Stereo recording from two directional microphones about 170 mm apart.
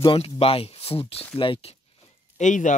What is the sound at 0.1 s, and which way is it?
Speech, 35° left (ahead or behind).